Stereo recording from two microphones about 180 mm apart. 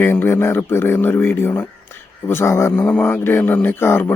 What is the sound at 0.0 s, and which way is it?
Speech, 15° left (ahead or behind).